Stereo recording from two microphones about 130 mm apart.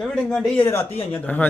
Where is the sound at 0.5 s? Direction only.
15° left (ahead or behind).